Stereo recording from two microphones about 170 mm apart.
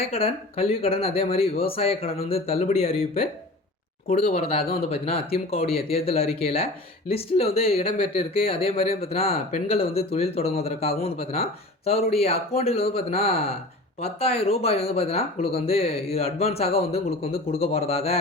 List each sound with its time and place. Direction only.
0.0 s speech: 35° left (ahead or behind)
4.1 s speech: 40° left (ahead or behind)